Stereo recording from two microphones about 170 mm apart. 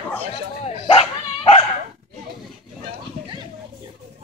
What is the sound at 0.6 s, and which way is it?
Dog, 35° left (ahead or behind).